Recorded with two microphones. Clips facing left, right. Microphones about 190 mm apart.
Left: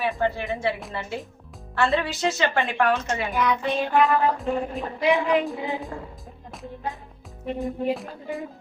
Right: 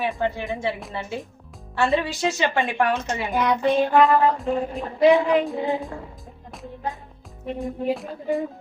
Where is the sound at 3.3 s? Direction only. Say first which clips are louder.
Right 3 dB; 30° right (ahead or behind).